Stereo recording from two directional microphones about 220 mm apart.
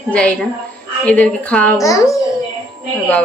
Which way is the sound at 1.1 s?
5° left (ahead or behind).